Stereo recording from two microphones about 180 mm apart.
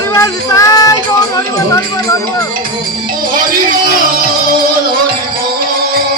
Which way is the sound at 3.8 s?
50° right (ahead or behind).